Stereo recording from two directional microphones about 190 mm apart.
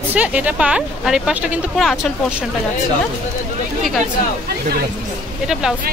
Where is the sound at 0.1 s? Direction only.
5° right (ahead or behind).